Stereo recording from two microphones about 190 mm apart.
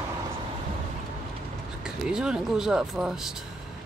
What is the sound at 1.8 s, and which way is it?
Speech, 5° right (ahead or behind).